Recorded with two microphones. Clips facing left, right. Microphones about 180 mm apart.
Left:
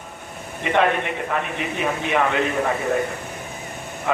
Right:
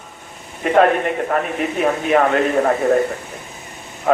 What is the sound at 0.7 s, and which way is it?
A man's voice, 45° right (ahead or behind).